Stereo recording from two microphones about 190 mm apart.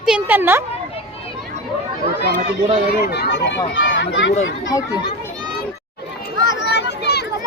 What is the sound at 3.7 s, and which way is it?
Speech, 75° left (ahead or behind).